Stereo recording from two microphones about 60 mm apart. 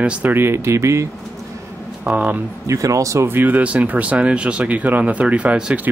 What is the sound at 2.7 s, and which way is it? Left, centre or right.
Speech, right.